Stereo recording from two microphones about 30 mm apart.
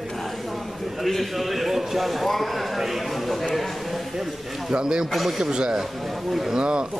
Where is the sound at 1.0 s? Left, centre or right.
Centre.